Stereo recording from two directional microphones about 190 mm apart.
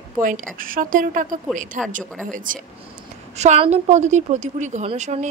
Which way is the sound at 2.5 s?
45° right (ahead or behind).